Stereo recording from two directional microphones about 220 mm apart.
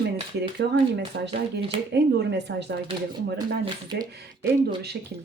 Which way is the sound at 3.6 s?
20° right (ahead or behind).